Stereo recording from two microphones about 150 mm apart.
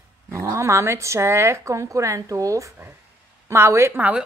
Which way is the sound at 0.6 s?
20° right (ahead or behind).